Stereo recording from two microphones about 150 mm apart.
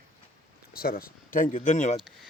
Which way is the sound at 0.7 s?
80° left.